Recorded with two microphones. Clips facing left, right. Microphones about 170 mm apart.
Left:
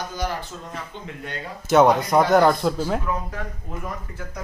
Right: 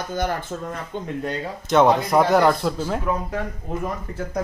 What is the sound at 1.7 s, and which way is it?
Speech, centre (ahead or behind).